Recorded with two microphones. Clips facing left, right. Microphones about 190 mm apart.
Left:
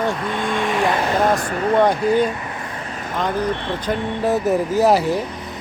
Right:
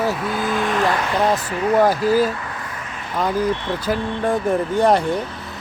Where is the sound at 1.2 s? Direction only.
50° left (ahead or behind).